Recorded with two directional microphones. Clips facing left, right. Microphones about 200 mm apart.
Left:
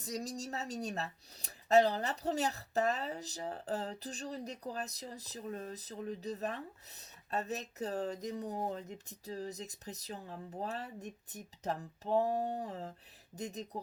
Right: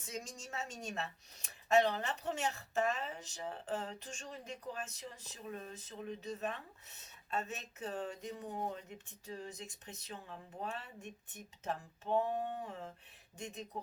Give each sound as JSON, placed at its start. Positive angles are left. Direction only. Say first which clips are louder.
{"t": 0.0, "sound": "speech", "louder": "left 6 dB", "side_deg": 35}